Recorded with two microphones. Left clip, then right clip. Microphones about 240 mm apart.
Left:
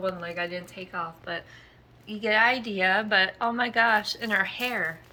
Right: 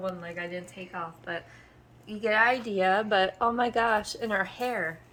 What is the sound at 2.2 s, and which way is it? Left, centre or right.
A woman's voice, right.